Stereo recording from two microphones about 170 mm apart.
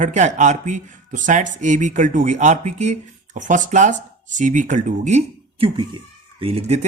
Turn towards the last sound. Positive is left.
turn(degrees=-40)  # may be behind; listen again after turning